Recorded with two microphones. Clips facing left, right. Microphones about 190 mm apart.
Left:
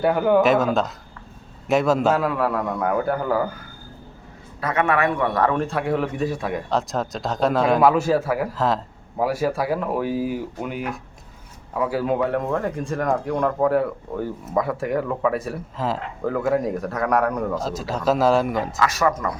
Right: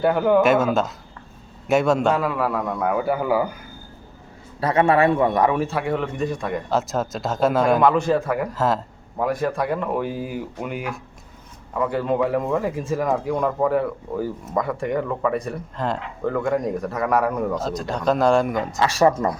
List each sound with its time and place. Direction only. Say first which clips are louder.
0.0 s speech: even; centre (ahead or behind)
4.6 s speech: right 4 dB; 30° right (ahead or behind); by 18.8 s centre (ahead or behind)
18.8 s speech: right 5 dB; 30° right (ahead or behind)